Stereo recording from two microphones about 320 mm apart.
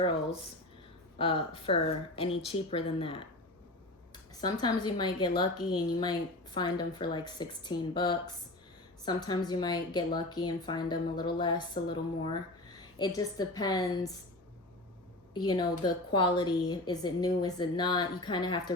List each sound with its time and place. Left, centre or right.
1.2 s a woman's voice: centre
15.3 s a woman's voice: centre